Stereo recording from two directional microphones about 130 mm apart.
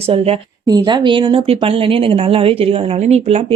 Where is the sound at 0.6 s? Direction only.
35° right (ahead or behind).